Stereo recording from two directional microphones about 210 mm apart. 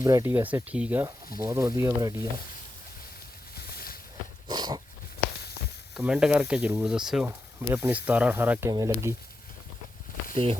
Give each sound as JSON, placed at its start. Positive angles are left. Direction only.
{"t": 0.0, "sound": "speech", "side_deg": -15}
{"t": 3.7, "sound": "a sound", "side_deg": 45}
{"t": 4.4, "sound": "dog", "side_deg": -20}
{"t": 5.9, "sound": "speech", "side_deg": -5}
{"t": 10.3, "sound": "speech", "side_deg": -30}